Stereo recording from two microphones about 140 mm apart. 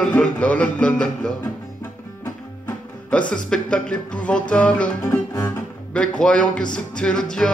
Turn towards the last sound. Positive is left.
turn(degrees=5)  # may be behind; listen again after turning